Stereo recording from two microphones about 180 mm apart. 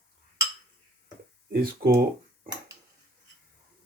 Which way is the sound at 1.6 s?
55° right (ahead or behind).